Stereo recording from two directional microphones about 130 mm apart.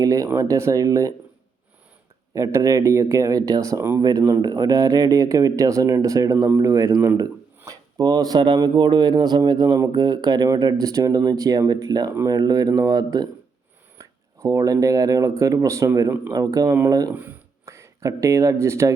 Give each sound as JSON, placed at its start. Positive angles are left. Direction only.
{"t": 0.0, "sound": "speech", "side_deg": -25}
{"t": 2.3, "sound": "speech", "side_deg": -25}